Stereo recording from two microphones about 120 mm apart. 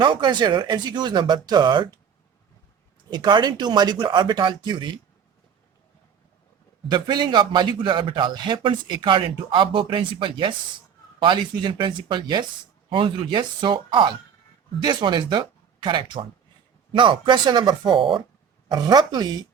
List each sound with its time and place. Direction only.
0.0 s a man's voice: 40° right (ahead or behind)
3.1 s a man's voice: 35° right (ahead or behind)
6.9 s a man's voice: 40° right (ahead or behind)